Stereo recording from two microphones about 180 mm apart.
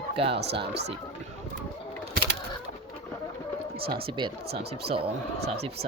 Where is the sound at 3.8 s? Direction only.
60° right (ahead or behind).